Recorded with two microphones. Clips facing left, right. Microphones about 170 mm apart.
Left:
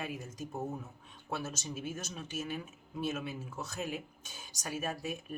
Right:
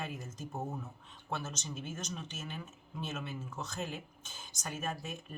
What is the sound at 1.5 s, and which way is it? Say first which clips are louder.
Speech: left 3 dB; 10° left (ahead or behind).